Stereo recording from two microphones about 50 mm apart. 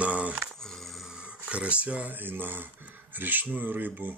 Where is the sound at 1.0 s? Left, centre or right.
Centre.